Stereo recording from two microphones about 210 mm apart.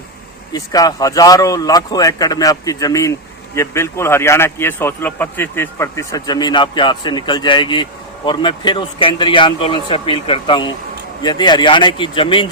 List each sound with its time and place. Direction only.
0.5 s speech: 15° left (ahead or behind)